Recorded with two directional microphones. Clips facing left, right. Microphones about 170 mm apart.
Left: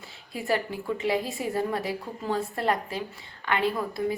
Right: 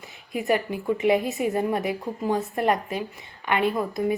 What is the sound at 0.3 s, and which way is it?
A woman's voice, 15° right (ahead or behind).